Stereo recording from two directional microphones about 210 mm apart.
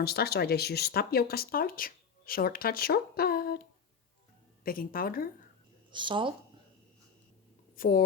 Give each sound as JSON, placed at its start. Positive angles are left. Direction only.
{"t": 0.0, "sound": "speech", "side_deg": 50}
{"t": 4.6, "sound": "a woman's voice", "side_deg": 45}
{"t": 5.9, "sound": "speech", "side_deg": -25}
{"t": 7.8, "sound": "speech", "side_deg": 45}